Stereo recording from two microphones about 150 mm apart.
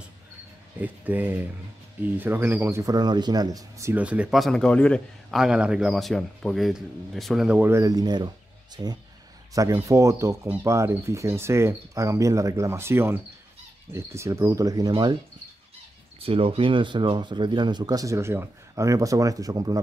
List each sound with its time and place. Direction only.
0.7 s speech: 10° right (ahead or behind)
4.0 s a man's voice: 10° right (ahead or behind)
7.7 s speech: 25° right (ahead or behind)
16.2 s speech: 40° right (ahead or behind)